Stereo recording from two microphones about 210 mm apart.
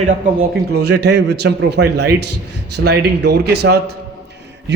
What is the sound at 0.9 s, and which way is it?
A man's voice, 55° right (ahead or behind).